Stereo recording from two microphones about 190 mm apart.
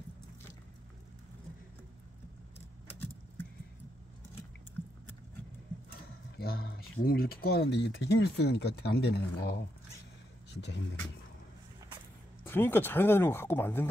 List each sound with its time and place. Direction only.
6.3 s speech: 55° left (ahead or behind)
12.4 s speech: 10° left (ahead or behind)